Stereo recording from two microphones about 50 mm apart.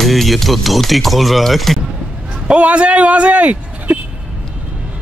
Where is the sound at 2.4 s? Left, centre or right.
Right.